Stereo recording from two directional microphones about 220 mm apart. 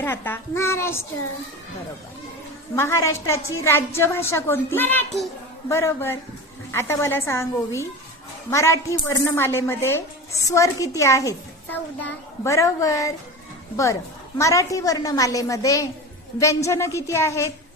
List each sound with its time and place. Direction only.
0.0 s a woman's voice: 10° left (ahead or behind)
2.7 s a woman's voice: 10° left (ahead or behind)
14.3 s a woman's voice: 15° left (ahead or behind)